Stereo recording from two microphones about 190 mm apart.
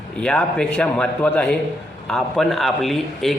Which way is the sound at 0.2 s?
5° left (ahead or behind).